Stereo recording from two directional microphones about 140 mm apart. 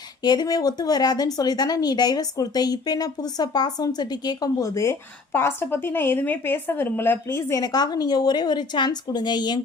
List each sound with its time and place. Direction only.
0.2 s a woman's voice: 30° left (ahead or behind)